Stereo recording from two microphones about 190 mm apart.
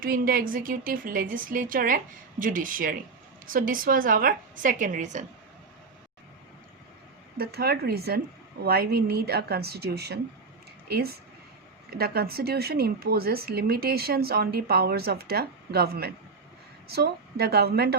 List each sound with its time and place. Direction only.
0.0 s speech: 50° right (ahead or behind)
7.3 s speech: 55° right (ahead or behind)